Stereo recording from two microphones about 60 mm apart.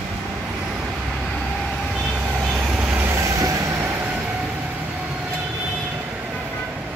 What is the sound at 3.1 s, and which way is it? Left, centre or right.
Train, right.